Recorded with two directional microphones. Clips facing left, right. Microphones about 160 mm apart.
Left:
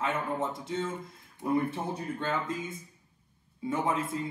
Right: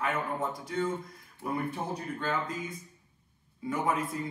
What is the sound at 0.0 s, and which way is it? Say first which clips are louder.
A man's voice: left 1 dB; 25° left (ahead or behind).